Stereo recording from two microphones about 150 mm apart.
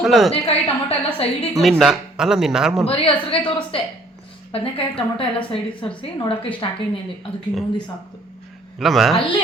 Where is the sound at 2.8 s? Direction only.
40° left (ahead or behind).